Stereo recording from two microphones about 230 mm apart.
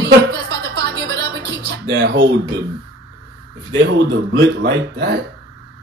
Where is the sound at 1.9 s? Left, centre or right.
Right.